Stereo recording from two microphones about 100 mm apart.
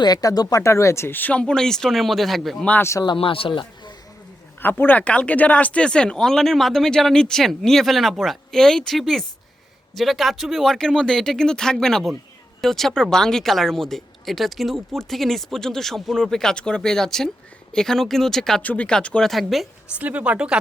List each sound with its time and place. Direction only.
0.0 s speech: 40° left (ahead or behind); by 2.6 s centre (ahead or behind)
2.6 s speech: 20° left (ahead or behind)
3.2 s speech: 65° left (ahead or behind)
4.6 s speech: 20° left (ahead or behind); by 19.6 s centre (ahead or behind)
20.0 s speech: 15° right (ahead or behind)